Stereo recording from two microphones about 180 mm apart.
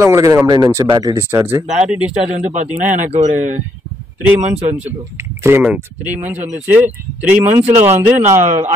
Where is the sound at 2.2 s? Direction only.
35° right (ahead or behind).